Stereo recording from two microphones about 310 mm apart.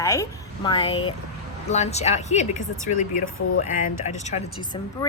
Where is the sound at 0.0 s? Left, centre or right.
Centre.